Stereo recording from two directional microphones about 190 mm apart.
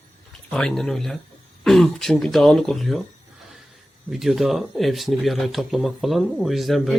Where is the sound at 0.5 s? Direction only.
5° left (ahead or behind).